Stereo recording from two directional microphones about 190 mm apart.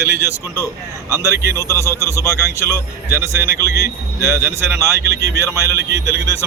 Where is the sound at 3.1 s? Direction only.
15° right (ahead or behind).